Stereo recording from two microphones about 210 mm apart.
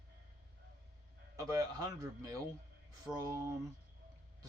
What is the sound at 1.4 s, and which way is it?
Speech, 15° right (ahead or behind).